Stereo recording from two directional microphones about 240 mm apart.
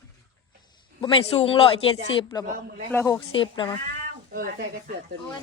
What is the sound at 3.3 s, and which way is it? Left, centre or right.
Speech, left.